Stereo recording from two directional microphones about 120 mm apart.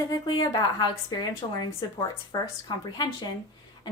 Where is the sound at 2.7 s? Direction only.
35° left (ahead or behind).